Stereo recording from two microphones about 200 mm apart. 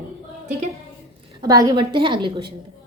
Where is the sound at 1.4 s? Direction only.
20° right (ahead or behind).